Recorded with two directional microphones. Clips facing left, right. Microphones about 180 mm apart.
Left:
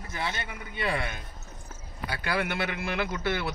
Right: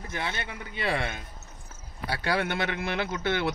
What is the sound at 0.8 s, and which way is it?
Speech, 30° right (ahead or behind).